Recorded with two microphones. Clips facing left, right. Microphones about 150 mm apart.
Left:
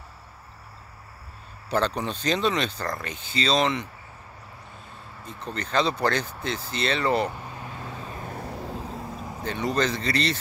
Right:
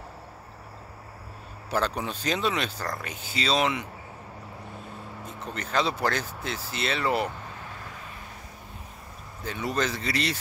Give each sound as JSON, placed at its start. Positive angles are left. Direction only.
{"t": 1.7, "sound": "speech", "side_deg": -5}
{"t": 5.2, "sound": "speech", "side_deg": -10}
{"t": 7.9, "sound": "vehicle", "side_deg": 30}
{"t": 8.3, "sound": "vehicle", "side_deg": 60}
{"t": 9.4, "sound": "speech", "side_deg": -5}